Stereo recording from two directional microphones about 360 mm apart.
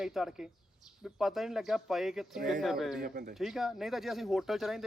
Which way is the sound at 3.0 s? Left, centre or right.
Right.